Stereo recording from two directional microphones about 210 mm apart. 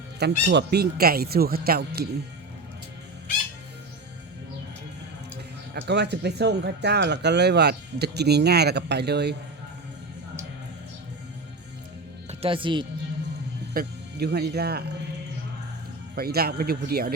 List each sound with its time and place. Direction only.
0.2 s speech: 50° right (ahead or behind)
5.7 s speech: 55° right (ahead or behind)
12.3 s speech: 25° right (ahead or behind)
13.7 s speech: 50° right (ahead or behind)
16.1 s speech: 45° right (ahead or behind)